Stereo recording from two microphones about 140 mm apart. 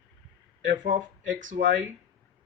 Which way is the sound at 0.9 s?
70° right (ahead or behind).